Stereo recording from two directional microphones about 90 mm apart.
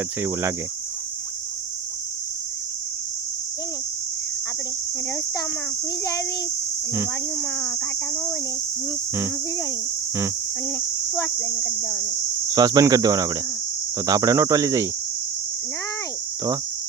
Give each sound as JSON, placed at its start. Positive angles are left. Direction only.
{"t": 0.2, "sound": "speech", "side_deg": -30}
{"t": 7.3, "sound": "speech", "side_deg": 30}
{"t": 11.3, "sound": "speech", "side_deg": 25}
{"t": 12.5, "sound": "speech", "side_deg": -45}